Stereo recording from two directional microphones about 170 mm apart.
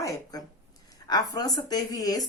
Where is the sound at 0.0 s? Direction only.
20° left (ahead or behind).